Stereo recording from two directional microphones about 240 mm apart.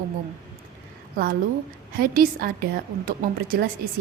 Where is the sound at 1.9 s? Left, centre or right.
Right.